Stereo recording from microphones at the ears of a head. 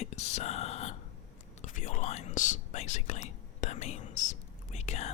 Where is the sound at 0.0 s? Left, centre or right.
Left.